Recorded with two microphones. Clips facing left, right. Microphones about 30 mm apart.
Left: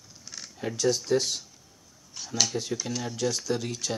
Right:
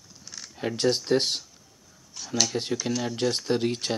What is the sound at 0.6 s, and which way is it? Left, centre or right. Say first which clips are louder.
Speech: right 2 dB; right.